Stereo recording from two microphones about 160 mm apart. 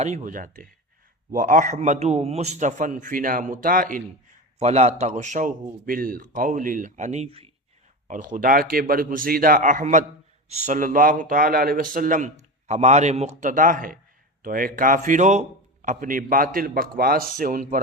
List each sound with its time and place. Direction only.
0.0 s a man's voice: 50° right (ahead or behind)
4.6 s a man's voice: 40° right (ahead or behind)
8.0 s a man's voice: 55° right (ahead or behind)